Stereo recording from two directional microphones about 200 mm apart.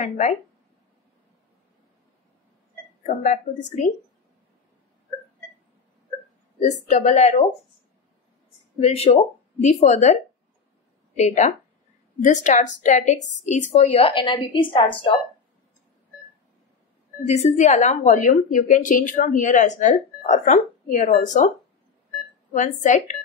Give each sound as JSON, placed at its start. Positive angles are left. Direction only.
{"t": 0.2, "sound": "a woman's voice", "side_deg": 35}
{"t": 3.1, "sound": "a woman's voice", "side_deg": 35}
{"t": 6.6, "sound": "a woman's voice", "side_deg": 35}
{"t": 8.7, "sound": "a woman's voice", "side_deg": 30}
{"t": 11.1, "sound": "a woman's voice", "side_deg": 35}
{"t": 17.3, "sound": "a woman's voice", "side_deg": 35}
{"t": 22.5, "sound": "a woman's voice", "side_deg": 40}